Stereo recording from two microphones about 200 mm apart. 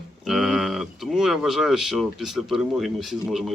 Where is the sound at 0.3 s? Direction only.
Centre (ahead or behind).